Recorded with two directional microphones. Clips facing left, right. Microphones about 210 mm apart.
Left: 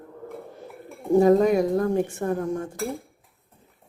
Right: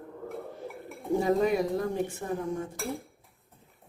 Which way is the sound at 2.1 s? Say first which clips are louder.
Left 6 dB; 75° left (ahead or behind).